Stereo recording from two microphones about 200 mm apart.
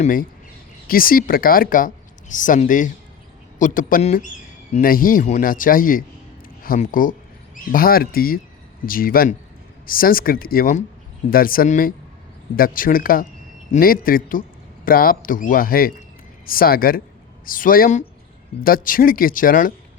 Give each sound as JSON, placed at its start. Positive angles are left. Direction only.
{"t": 0.0, "sound": "a man's voice", "side_deg": 45}